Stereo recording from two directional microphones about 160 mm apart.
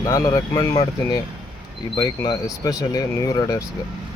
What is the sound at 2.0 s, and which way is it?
Speech, 25° left (ahead or behind).